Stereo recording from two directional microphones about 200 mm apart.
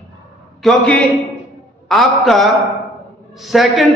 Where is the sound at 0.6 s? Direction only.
5° left (ahead or behind).